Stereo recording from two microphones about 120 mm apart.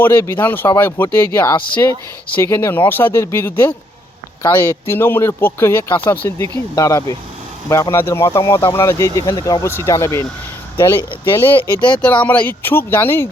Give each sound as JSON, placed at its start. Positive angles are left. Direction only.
{"t": 0.0, "sound": "speech", "side_deg": 20}
{"t": 11.6, "sound": "speech", "side_deg": 40}
{"t": 12.0, "sound": "speech", "side_deg": 15}